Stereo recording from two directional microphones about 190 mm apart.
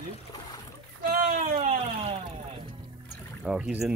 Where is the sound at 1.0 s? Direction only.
50° right (ahead or behind).